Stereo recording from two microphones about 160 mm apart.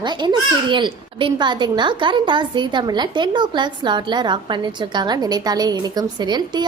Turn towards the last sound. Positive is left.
turn(degrees=-25)  # may be behind; listen again after turning